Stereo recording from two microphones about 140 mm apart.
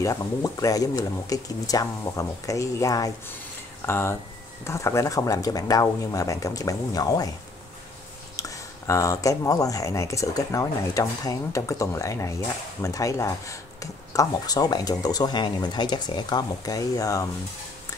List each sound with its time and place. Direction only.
0.0 s speech: 25° left (ahead or behind)
8.4 s speech: 20° left (ahead or behind)